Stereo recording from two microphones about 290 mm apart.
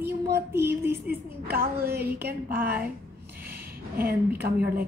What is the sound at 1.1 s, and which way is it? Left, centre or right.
A woman's voice, right.